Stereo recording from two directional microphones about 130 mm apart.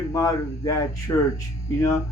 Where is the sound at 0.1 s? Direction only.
25° left (ahead or behind).